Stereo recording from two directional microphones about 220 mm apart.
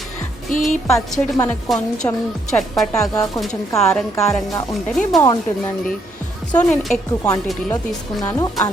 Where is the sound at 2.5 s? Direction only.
Centre (ahead or behind).